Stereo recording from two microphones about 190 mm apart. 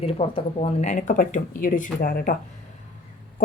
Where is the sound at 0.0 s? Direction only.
30° left (ahead or behind); by 2.3 s 50° left (ahead or behind).